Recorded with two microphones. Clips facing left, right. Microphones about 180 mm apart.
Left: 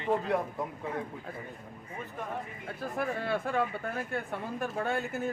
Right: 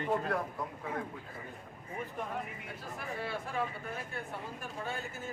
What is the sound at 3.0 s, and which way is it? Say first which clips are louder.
Speech: left 8 dB; 60° left (ahead or behind).